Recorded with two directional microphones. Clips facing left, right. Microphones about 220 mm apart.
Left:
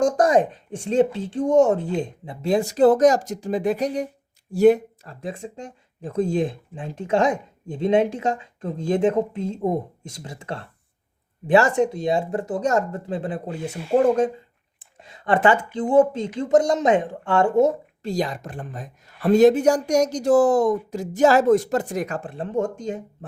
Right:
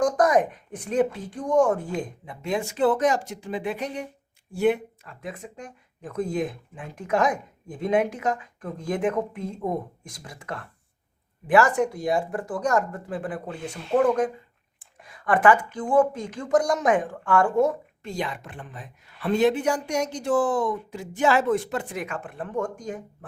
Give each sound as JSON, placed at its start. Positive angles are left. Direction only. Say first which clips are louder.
{"t": 0.0, "sound": "a woman's voice", "louder": "left 3 dB", "side_deg": 25}
{"t": 18.0, "sound": "a woman's voice", "louder": "left 6 dB", "side_deg": 35}